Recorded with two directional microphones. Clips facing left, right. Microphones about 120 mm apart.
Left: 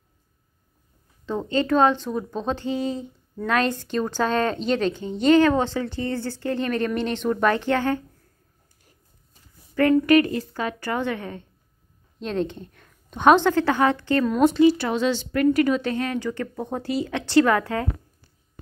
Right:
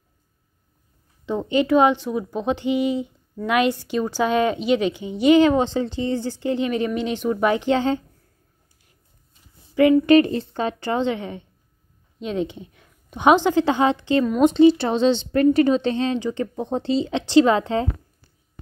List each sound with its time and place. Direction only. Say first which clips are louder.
1.5 s speech: right 2 dB; 15° right (ahead or behind)
10.0 s a woman's voice: right 3 dB; 25° right (ahead or behind)